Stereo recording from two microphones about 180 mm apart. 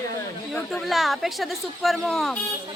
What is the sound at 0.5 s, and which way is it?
Speech, centre (ahead or behind).